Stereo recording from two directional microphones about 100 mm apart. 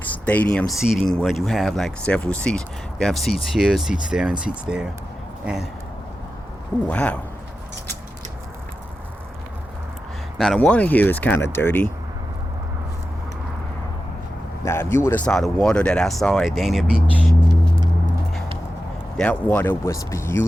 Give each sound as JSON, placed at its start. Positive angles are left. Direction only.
{"t": 0.3, "sound": "speech", "side_deg": 10}
{"t": 6.8, "sound": "speech", "side_deg": 10}
{"t": 10.3, "sound": "speech", "side_deg": 0}
{"t": 10.6, "sound": "speech", "side_deg": 15}
{"t": 14.6, "sound": "speech", "side_deg": 25}
{"t": 15.2, "sound": "speech", "side_deg": 5}
{"t": 19.2, "sound": "speech", "side_deg": 15}
{"t": 19.9, "sound": "speech", "side_deg": 30}